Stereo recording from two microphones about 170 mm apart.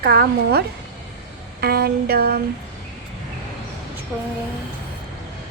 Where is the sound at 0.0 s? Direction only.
70° right (ahead or behind).